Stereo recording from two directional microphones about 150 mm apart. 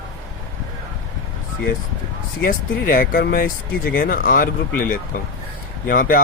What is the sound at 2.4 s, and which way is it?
Speech, 75° left (ahead or behind).